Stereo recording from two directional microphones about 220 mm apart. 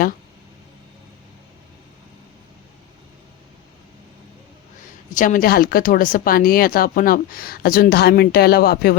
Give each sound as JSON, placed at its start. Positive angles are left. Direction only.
{"t": 5.1, "sound": "speech", "side_deg": 35}